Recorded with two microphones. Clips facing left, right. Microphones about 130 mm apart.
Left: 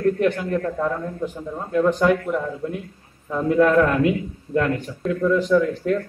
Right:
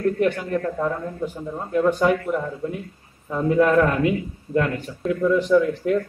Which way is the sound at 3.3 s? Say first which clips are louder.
Left 1 dB; 5° right (ahead or behind).